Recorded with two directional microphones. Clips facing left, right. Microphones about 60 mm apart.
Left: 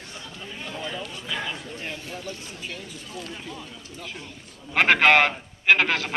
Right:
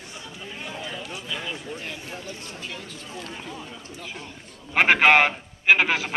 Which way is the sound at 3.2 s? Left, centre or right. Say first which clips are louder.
Even; centre.